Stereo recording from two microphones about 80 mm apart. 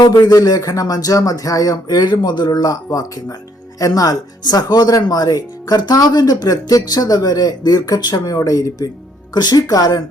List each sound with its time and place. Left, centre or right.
0.0 s speech: left
8.4 s speech: left
9.3 s speech: left